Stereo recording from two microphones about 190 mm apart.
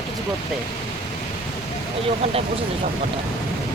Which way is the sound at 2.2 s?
30° right (ahead or behind).